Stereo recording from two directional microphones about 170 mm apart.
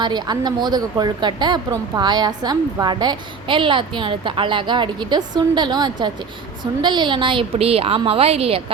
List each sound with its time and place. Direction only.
0.0 s a woman's voice: 25° right (ahead or behind)